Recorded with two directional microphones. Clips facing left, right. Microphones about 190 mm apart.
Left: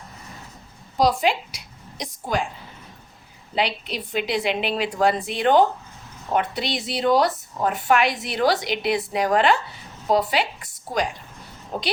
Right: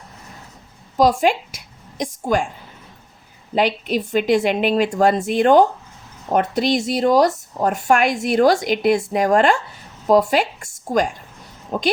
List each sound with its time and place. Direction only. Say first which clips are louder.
0.9 s a woman's voice: right 4 dB; 50° right (ahead or behind)
3.5 s a woman's voice: right 7 dB; 50° right (ahead or behind)